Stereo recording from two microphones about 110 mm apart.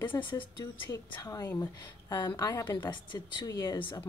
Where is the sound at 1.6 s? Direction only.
40° left (ahead or behind).